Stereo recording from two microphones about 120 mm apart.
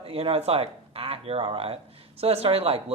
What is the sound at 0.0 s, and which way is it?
Speech, 55° right (ahead or behind).